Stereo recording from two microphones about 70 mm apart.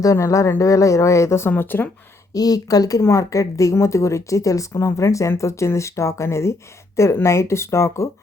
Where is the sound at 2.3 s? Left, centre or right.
Left.